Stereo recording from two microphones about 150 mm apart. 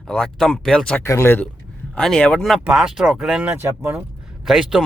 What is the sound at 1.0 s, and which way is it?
Speech, 20° left (ahead or behind).